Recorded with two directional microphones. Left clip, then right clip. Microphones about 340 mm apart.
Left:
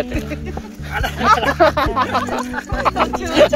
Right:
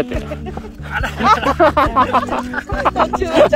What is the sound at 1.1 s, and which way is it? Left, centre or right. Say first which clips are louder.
Speech: right 1 dB; right.